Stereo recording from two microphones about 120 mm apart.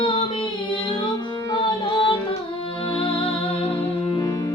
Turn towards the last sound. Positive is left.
turn(degrees=50)  # may be behind; listen again after turning